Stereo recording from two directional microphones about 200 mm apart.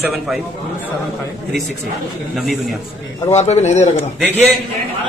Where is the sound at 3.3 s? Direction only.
35° left (ahead or behind).